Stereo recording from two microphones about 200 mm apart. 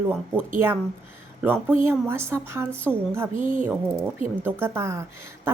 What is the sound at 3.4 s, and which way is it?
Speech, 40° right (ahead or behind).